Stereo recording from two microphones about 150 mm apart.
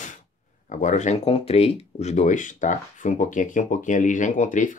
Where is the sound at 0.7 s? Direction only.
55° left (ahead or behind).